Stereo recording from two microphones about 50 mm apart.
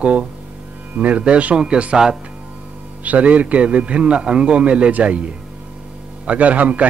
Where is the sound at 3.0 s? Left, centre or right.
Right.